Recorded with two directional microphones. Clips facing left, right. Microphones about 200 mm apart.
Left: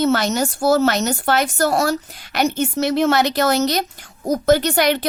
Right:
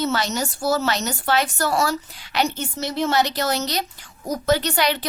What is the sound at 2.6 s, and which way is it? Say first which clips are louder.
Speech: left 7 dB; 75° left (ahead or behind).